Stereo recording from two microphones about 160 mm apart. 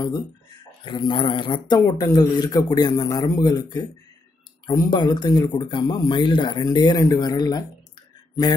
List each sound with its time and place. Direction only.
0.8 s speech: 30° left (ahead or behind)